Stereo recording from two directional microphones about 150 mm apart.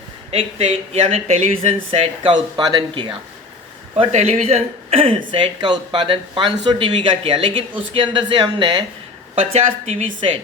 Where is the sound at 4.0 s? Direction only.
50° right (ahead or behind).